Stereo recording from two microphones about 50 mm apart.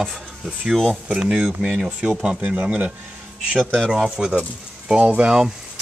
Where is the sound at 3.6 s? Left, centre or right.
Centre.